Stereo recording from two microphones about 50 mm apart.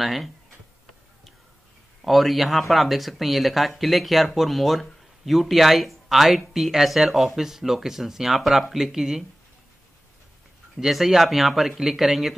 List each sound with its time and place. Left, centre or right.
0.0 s speech: centre
2.0 s speech: centre
10.8 s speech: centre